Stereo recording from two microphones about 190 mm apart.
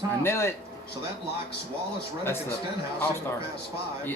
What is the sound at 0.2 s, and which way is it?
Speech, 15° left (ahead or behind).